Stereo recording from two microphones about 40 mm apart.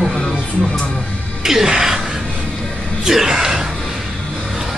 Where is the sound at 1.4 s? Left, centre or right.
Centre.